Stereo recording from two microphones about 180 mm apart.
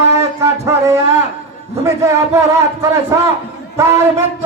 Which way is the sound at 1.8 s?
15° right (ahead or behind).